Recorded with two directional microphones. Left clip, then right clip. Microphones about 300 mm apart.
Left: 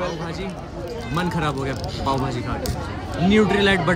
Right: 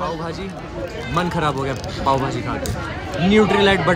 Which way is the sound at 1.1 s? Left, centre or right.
Centre.